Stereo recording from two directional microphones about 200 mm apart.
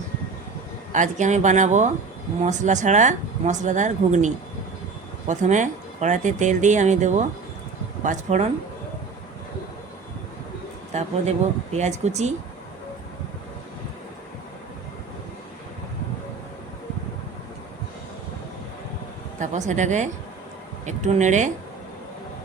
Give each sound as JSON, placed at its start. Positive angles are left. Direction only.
{"t": 0.9, "sound": "speech", "side_deg": -40}
{"t": 5.3, "sound": "speech", "side_deg": -35}
{"t": 10.9, "sound": "speech", "side_deg": -35}
{"t": 19.4, "sound": "speech", "side_deg": -35}